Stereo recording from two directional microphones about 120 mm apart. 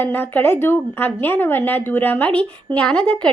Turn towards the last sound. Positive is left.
turn(degrees=10)  # may be behind; listen again after turning